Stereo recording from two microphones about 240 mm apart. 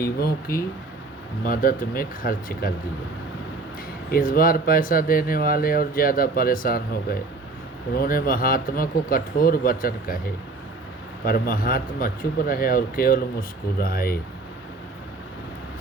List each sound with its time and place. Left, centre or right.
0.2 s speech: left
4.1 s speech: left
11.3 s speech: left